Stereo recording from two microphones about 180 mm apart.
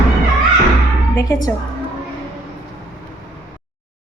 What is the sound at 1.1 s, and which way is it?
Speech, 20° left (ahead or behind).